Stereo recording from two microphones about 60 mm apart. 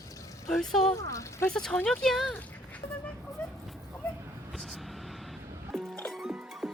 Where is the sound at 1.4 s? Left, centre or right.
Centre.